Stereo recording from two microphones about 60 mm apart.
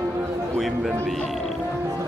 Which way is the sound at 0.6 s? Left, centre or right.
Centre.